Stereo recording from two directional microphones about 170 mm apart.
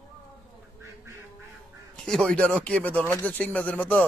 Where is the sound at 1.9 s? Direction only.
5° left (ahead or behind).